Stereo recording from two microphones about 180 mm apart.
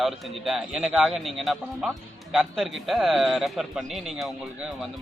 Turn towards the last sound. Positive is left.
turn(degrees=0)  # may be behind; listen again after turning